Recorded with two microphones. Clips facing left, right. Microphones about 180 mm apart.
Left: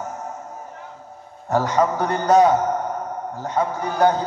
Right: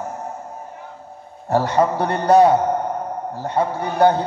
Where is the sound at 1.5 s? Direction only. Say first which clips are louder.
Right 2 dB; 30° right (ahead or behind).